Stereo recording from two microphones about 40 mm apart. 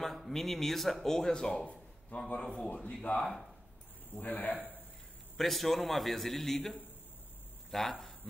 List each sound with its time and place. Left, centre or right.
0.0 s speech: centre
2.1 s a man's voice: left
2.5 s a man's voice: left
4.2 s a man's voice: left
5.4 s a man's voice: centre
7.7 s speech: centre